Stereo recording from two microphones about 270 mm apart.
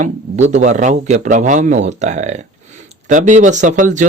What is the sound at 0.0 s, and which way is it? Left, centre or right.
Speech, right.